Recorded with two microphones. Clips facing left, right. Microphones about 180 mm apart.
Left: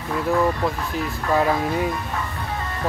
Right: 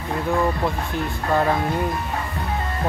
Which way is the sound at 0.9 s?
5° left (ahead or behind).